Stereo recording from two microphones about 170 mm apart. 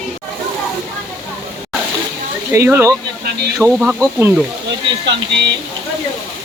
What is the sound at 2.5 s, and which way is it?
Speech, 15° right (ahead or behind).